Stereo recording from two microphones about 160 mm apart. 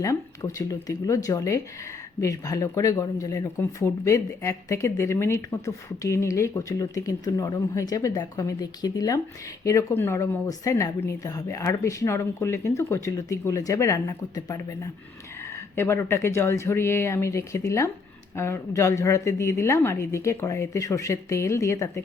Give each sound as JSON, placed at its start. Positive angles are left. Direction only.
{"t": 0.0, "sound": "a woman's voice", "side_deg": 20}